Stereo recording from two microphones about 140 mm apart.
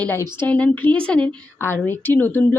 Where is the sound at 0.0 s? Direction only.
15° left (ahead or behind).